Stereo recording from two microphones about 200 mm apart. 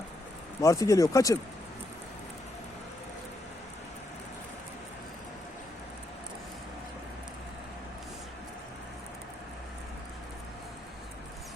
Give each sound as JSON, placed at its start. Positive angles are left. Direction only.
{"t": 0.6, "sound": "speech", "side_deg": 15}